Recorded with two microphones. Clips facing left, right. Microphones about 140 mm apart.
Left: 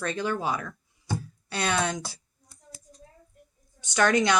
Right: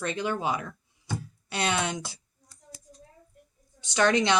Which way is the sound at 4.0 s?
25° right (ahead or behind).